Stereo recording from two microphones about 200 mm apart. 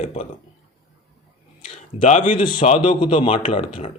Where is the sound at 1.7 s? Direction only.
30° left (ahead or behind).